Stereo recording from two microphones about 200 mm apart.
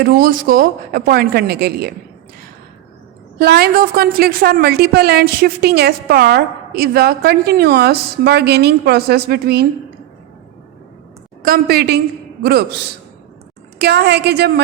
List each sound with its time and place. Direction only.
0.0 s a woman's voice: 45° right (ahead or behind)
3.3 s a woman's voice: 55° right (ahead or behind)
11.4 s a woman's voice: 50° right (ahead or behind)
13.7 s a woman's voice: 55° right (ahead or behind)